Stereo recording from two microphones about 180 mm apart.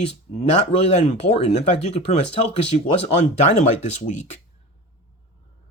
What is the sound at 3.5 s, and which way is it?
Speech, 40° left (ahead or behind).